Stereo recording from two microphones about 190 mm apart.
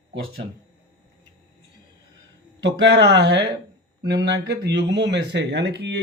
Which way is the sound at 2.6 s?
65° right (ahead or behind).